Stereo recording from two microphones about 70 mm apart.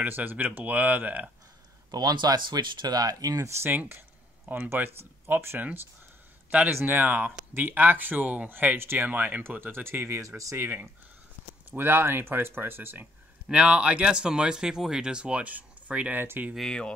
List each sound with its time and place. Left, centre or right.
0.0 s speech: right
1.9 s speech: right
3.6 s speech: right
6.7 s speech: right
10.2 s speech: right
13.5 s speech: centre
16.5 s speech: centre